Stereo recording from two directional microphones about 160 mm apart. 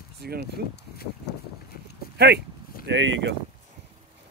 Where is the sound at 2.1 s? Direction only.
90° right.